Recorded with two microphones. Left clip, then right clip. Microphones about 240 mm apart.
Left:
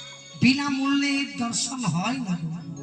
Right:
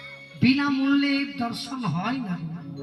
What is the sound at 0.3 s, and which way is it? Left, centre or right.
A man's voice, left.